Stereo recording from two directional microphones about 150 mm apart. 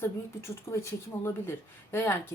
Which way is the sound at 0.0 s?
20° left (ahead or behind).